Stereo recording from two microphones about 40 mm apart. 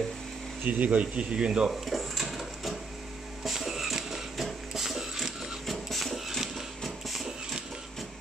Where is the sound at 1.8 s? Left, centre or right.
Centre.